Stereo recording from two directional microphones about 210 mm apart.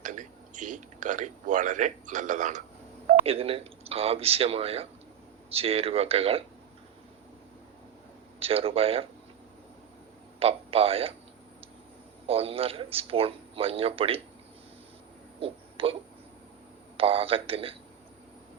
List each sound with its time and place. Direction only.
0.0 s a man's voice: 35° right (ahead or behind)
8.4 s a man's voice: 25° right (ahead or behind)
10.4 s a man's voice: 25° right (ahead or behind)
12.2 s a man's voice: 25° right (ahead or behind)
15.4 s a sound: 25° right (ahead or behind)
17.0 s a man's voice: 25° right (ahead or behind)